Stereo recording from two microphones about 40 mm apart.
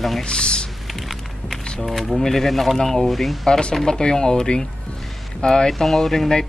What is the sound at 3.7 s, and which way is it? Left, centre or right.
Speech, centre.